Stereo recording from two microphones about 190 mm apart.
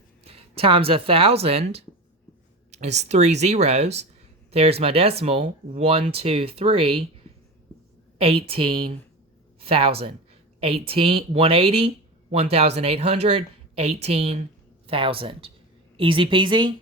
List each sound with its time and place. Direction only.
0.3 s speech: 30° right (ahead or behind)
8.2 s speech: 30° right (ahead or behind)